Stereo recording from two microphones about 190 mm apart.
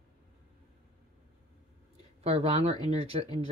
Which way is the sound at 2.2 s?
35° right (ahead or behind).